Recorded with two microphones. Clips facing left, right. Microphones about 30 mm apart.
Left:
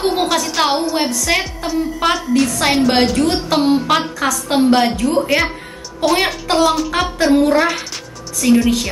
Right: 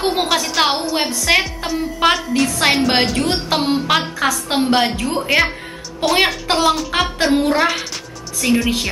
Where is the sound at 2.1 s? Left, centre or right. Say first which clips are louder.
Left 2 dB; centre.